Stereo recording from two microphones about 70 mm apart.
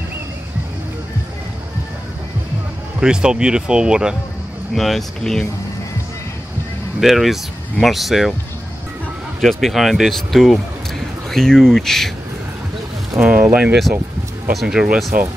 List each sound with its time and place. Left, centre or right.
3.0 s speech: centre
4.7 s speech: centre
7.0 s speech: centre
9.4 s speech: centre
13.2 s speech: right
14.5 s speech: centre